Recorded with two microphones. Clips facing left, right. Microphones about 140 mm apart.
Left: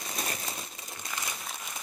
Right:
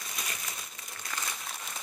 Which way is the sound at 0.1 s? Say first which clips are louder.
Left 6 dB; 35° left (ahead or behind).